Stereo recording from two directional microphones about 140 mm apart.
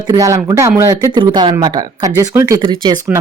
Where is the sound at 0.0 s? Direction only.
25° right (ahead or behind).